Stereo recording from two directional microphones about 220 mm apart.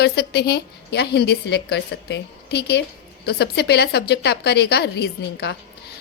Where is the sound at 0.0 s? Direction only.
45° left (ahead or behind).